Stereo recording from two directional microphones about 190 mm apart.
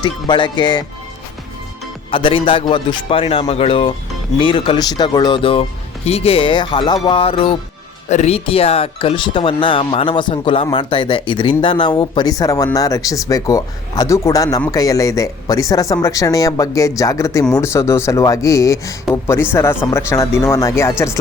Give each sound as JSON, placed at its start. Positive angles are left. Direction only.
{"t": 0.0, "sound": "speech", "side_deg": 25}
{"t": 2.0, "sound": "speech", "side_deg": 25}